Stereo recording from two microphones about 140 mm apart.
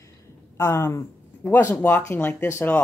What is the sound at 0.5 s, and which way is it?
Speech, 20° left (ahead or behind).